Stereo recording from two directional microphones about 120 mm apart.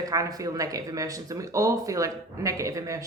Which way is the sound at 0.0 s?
30° right (ahead or behind).